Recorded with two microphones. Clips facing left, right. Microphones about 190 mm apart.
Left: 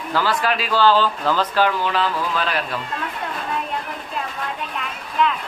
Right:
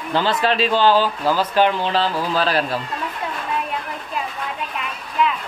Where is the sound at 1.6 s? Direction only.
30° right (ahead or behind).